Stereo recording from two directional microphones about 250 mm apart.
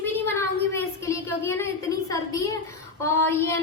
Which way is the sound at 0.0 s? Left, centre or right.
Centre.